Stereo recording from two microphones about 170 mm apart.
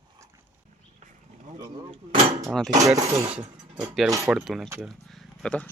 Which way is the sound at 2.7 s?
20° right (ahead or behind).